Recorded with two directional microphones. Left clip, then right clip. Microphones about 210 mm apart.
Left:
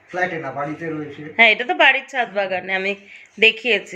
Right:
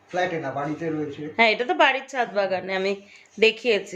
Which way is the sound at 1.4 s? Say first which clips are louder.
Left 5 dB; 5° right (ahead or behind).